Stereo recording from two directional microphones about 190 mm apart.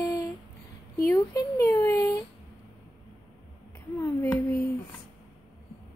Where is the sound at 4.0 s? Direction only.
15° left (ahead or behind).